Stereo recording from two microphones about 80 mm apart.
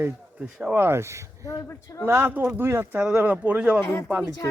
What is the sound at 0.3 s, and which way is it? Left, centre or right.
Speech, centre.